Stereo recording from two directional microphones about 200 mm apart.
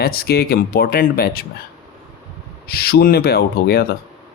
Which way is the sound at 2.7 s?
50° left (ahead or behind).